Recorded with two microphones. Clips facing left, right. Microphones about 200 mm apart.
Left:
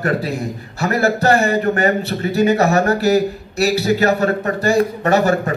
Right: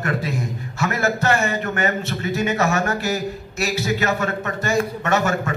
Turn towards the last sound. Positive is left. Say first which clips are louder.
# left 6 dB
turn(degrees=35)  # may be behind; listen again after turning